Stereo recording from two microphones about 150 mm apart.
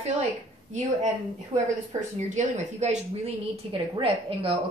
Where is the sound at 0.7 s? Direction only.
50° right (ahead or behind).